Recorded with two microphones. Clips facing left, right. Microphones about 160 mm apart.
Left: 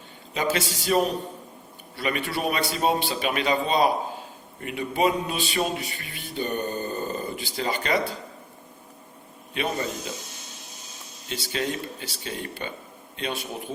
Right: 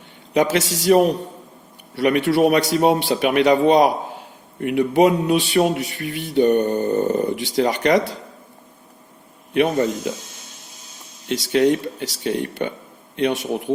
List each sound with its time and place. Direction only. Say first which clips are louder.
0.3 s speech: right 8 dB; 75° right (ahead or behind)
9.6 s speech: right 10 dB; 60° right (ahead or behind)
11.3 s speech: right 12 dB; 75° right (ahead or behind)